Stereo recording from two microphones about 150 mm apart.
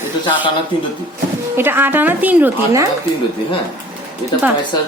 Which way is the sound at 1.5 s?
15° right (ahead or behind).